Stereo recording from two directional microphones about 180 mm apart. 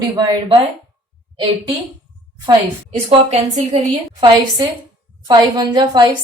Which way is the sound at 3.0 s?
40° right (ahead or behind).